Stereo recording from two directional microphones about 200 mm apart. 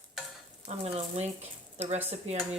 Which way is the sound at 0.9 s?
35° right (ahead or behind).